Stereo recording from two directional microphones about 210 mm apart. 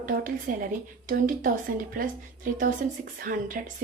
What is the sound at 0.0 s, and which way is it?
A woman's voice, 40° right (ahead or behind).